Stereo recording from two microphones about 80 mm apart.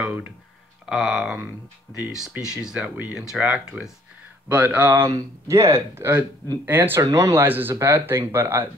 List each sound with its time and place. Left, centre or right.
0.8 s speech: centre; by 5.0 s right
5.0 s speech: right
7.0 s speech: right
7.4 s speech: right